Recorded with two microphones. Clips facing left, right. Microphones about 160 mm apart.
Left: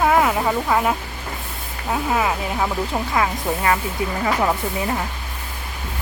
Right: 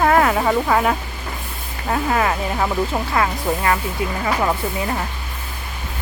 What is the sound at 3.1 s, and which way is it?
Speech, 20° left (ahead or behind).